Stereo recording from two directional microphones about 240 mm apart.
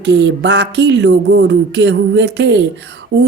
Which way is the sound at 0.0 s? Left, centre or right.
Right.